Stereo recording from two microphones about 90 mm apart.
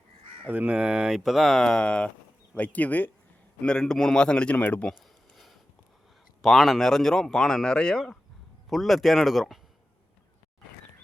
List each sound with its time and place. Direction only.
0.4 s a man's voice: 15° right (ahead or behind); by 4.9 s 15° left (ahead or behind)
6.4 s speech: centre (ahead or behind)